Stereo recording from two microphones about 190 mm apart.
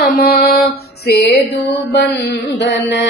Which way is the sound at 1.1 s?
60° left (ahead or behind).